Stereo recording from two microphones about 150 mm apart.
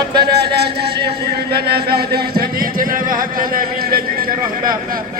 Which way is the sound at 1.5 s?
90° right.